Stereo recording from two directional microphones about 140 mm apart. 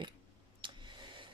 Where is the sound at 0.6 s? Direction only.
35° right (ahead or behind).